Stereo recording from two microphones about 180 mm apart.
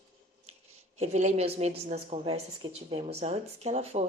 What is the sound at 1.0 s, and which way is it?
A woman's voice, 40° right (ahead or behind).